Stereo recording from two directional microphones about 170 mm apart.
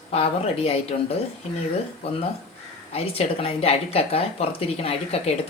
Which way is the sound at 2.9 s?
35° left (ahead or behind).